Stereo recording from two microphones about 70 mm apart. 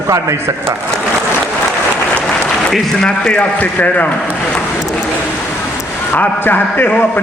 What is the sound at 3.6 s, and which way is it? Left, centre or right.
Speech, left.